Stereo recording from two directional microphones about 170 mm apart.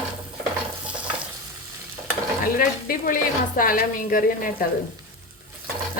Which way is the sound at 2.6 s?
55° left (ahead or behind).